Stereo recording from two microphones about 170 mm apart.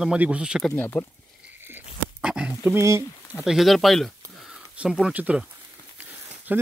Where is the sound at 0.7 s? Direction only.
10° left (ahead or behind).